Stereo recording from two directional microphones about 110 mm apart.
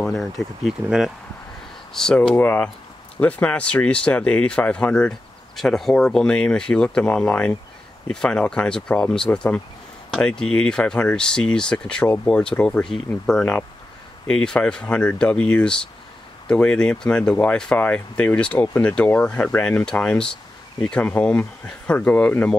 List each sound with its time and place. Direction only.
0.0 s speech: centre (ahead or behind)
2.0 s speech: 5° left (ahead or behind)